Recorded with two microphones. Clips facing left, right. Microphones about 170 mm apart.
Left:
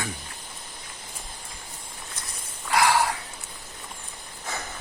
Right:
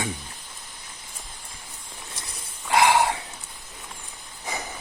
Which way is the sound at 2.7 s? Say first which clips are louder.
Right 2 dB; 20° right (ahead or behind).